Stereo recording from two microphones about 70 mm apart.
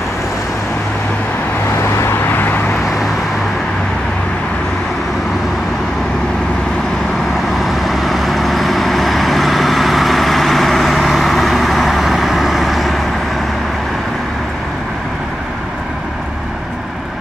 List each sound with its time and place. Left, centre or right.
1.8 s vehicle: left
7.6 s vehicle: centre